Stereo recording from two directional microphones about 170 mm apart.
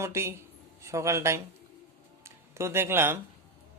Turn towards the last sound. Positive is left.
turn(degrees=-15)  # may be behind; listen again after turning